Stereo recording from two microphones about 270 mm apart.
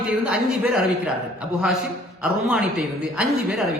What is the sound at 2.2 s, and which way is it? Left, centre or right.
Speech, centre.